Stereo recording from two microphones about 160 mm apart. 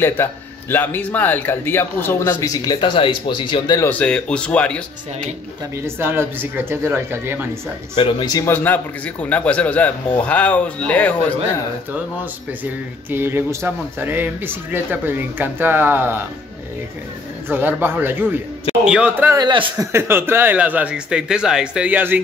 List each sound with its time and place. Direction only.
0.0 s speech: 15° left (ahead or behind)
4.0 s speech: 5° left (ahead or behind)
5.9 s speech: 15° right (ahead or behind)
7.9 s speech: 30° left (ahead or behind); by 11.3 s 10° left (ahead or behind)
13.1 s speech: 15° right (ahead or behind)
17.5 s speech: 10° right (ahead or behind)
19.4 s speech: 25° right (ahead or behind)